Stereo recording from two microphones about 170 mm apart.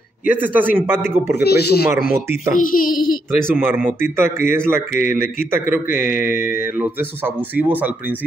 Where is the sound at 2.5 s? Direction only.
55° left (ahead or behind).